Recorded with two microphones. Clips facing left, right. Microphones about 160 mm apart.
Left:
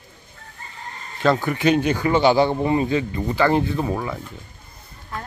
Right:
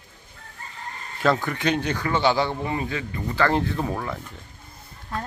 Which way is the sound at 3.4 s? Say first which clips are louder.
Left 3 dB; 5° left (ahead or behind).